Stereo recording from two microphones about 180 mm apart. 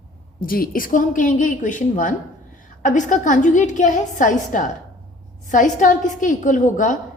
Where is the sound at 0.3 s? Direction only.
55° left (ahead or behind).